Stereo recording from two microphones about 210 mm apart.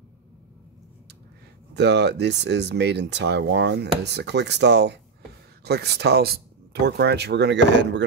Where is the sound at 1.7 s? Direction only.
55° right (ahead or behind).